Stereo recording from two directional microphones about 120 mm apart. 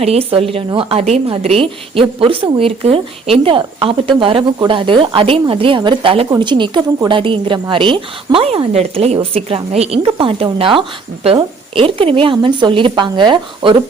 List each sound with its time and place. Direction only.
0.0 s a woman's voice: 55° right (ahead or behind)
9.1 s a woman's voice: 55° right (ahead or behind)